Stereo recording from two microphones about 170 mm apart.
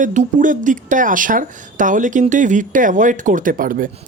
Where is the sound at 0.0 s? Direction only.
45° right (ahead or behind).